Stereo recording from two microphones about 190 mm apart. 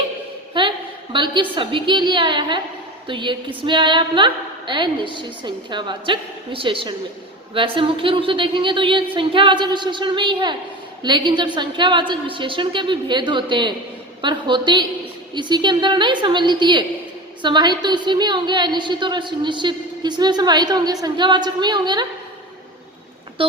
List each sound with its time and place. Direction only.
0.6 s a sound: 25° right (ahead or behind)
1.1 s a woman's voice: 25° right (ahead or behind)
23.4 s a woman's voice: 30° right (ahead or behind)